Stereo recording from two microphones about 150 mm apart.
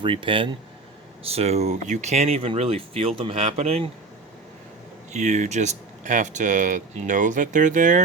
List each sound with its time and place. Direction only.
0.0 s speech: 35° right (ahead or behind)
5.1 s speech: 50° right (ahead or behind)